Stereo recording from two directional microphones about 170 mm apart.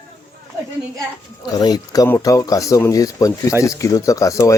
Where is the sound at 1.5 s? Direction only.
25° left (ahead or behind).